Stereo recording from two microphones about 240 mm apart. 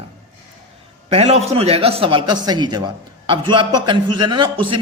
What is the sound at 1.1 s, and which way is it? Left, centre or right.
A man's voice, right.